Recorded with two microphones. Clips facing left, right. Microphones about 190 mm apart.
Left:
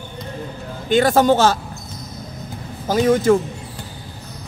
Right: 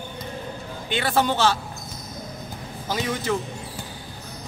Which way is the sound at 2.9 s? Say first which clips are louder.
Left 11 dB; 45° left (ahead or behind).